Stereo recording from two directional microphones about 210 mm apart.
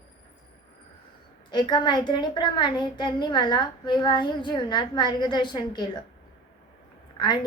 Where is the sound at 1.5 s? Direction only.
20° left (ahead or behind).